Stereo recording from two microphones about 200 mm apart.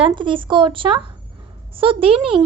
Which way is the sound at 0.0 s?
25° right (ahead or behind).